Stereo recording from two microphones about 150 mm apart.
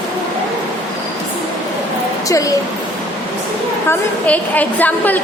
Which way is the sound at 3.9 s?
10° left (ahead or behind).